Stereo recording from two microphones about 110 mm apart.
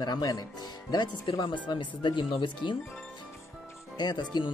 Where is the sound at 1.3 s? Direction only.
50° left (ahead or behind).